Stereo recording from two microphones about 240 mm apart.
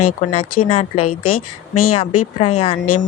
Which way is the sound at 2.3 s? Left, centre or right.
Left.